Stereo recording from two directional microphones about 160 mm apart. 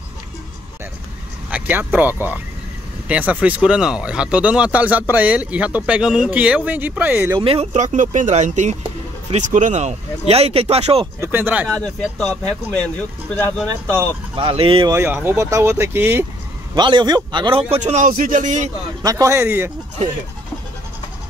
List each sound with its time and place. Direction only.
1.5 s speech: 10° right (ahead or behind)
7.3 s a man's voice: 35° right (ahead or behind)
11.1 s speech: 15° right (ahead or behind)
11.6 s speech: 5° left (ahead or behind)
14.3 s a man's voice: 35° right (ahead or behind)
15.1 s speech: 15° right (ahead or behind)
16.7 s a man's voice: 30° right (ahead or behind); by 18.7 s 50° right (ahead or behind)
19.0 s speech: 20° right (ahead or behind)